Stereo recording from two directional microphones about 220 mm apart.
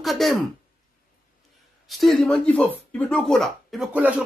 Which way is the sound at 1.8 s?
Centre (ahead or behind).